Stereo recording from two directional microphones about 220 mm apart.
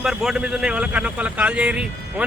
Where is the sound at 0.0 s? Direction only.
Centre (ahead or behind).